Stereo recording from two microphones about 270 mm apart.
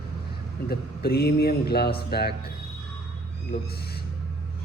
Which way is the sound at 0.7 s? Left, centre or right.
Left.